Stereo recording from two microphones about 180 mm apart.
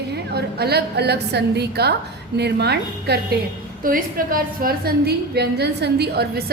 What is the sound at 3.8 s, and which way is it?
A woman's voice, 55° right (ahead or behind).